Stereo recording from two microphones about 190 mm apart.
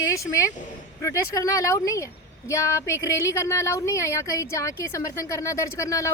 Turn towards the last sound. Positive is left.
turn(degrees=15)  # may be behind; listen again after turning